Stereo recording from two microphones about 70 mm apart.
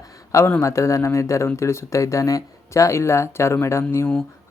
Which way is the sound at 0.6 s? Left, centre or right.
Left.